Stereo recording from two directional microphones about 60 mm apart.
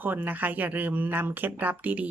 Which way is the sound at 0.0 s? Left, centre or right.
Right.